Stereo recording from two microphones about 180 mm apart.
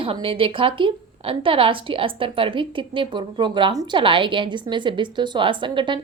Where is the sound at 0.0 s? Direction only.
30° right (ahead or behind).